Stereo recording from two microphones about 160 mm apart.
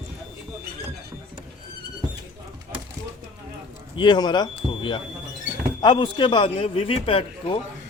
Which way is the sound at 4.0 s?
25° left (ahead or behind).